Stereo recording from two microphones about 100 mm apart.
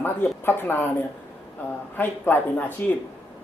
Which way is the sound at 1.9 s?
20° left (ahead or behind).